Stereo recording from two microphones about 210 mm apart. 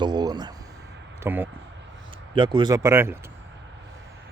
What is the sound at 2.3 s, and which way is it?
Speech, 25° right (ahead or behind).